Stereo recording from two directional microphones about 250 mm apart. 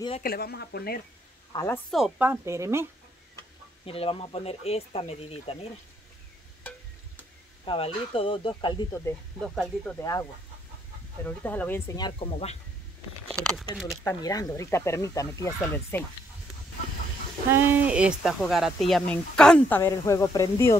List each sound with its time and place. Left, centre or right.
0.2 s speech: left
1.5 s speech: centre
1.9 s a woman's voice: centre
3.8 s speech: left
7.6 s speech: left
11.2 s speech: centre; by 12.5 s left
14.0 s speech: centre
17.5 s speech: centre